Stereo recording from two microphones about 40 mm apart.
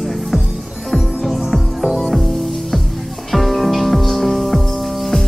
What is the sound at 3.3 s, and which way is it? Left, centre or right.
Music, centre.